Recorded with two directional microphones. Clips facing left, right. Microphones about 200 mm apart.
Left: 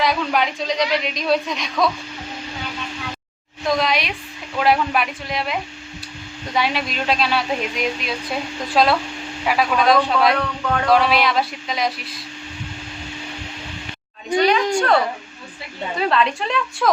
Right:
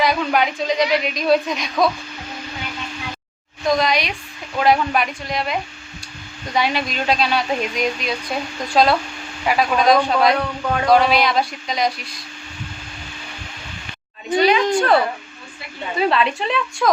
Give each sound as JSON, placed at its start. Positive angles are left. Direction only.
{"t": 0.0, "sound": "speech", "side_deg": 0}
{"t": 3.7, "sound": "speech", "side_deg": 0}
{"t": 14.3, "sound": "speech", "side_deg": -5}
{"t": 16.0, "sound": "speech", "side_deg": -5}